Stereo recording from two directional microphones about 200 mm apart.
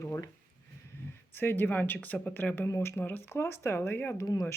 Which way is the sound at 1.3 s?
10° left (ahead or behind).